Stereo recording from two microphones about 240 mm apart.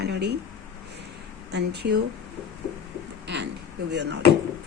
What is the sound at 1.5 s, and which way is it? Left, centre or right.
Speech, right.